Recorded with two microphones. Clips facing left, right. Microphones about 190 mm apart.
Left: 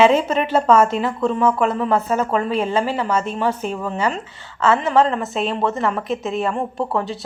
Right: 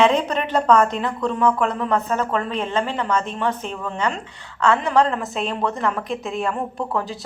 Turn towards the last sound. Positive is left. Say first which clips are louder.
# left 3 dB
turn(degrees=0)  # may be behind; listen again after turning